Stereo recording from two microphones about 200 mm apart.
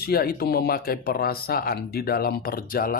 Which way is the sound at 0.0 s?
50° left (ahead or behind).